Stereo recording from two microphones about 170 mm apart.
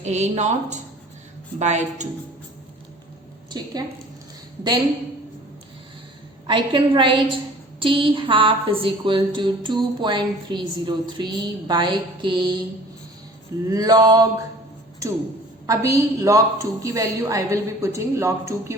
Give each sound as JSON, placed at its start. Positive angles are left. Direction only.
{"t": 0.0, "sound": "speech", "side_deg": -40}
{"t": 3.5, "sound": "a woman's voice", "side_deg": -25}
{"t": 6.5, "sound": "a woman's voice", "side_deg": -30}
{"t": 13.7, "sound": "a woman's voice", "side_deg": -25}
{"t": 15.6, "sound": "a woman's voice", "side_deg": -20}